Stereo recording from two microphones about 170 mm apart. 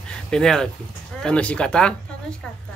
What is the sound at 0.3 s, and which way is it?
Speech, 5° left (ahead or behind).